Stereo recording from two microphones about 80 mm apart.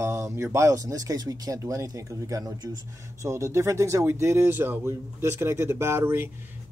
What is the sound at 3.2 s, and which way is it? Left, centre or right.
A man's voice, right.